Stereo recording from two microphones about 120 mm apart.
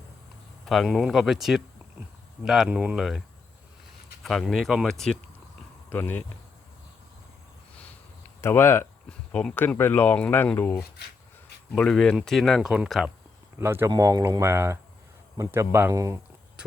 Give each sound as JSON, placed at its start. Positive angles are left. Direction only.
{"t": 0.6, "sound": "speech", "side_deg": 0}
{"t": 5.9, "sound": "speech", "side_deg": 15}
{"t": 8.4, "sound": "speech", "side_deg": 20}
{"t": 9.0, "sound": "speech", "side_deg": 5}
{"t": 11.7, "sound": "speech", "side_deg": 5}
{"t": 13.6, "sound": "speech", "side_deg": -20}
{"t": 16.6, "sound": "walk", "side_deg": -10}